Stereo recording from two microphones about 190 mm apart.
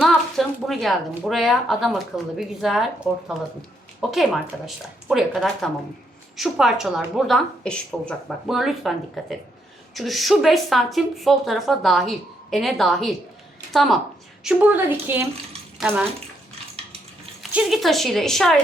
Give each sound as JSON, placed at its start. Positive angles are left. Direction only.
{"t": 0.0, "sound": "a woman's voice", "side_deg": 0}
{"t": 17.5, "sound": "speech", "side_deg": -5}